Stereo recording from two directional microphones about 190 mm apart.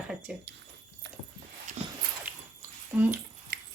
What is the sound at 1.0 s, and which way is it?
Dog, 75° right (ahead or behind).